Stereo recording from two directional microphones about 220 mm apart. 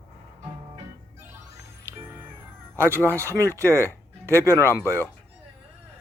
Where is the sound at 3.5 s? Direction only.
15° right (ahead or behind).